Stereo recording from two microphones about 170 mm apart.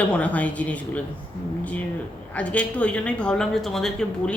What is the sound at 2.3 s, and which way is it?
A woman's voice, 10° left (ahead or behind).